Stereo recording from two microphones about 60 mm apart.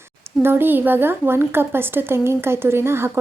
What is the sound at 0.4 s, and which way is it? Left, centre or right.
A woman's voice, right.